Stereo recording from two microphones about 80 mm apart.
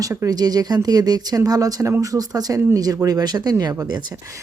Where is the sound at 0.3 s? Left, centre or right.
Right.